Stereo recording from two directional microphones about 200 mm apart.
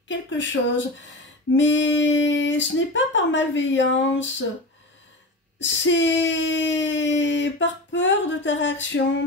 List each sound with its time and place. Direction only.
0.1 s speech: 65° left (ahead or behind)
5.6 s speech: 65° left (ahead or behind)